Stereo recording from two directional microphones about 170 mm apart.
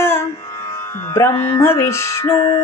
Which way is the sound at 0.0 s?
15° left (ahead or behind).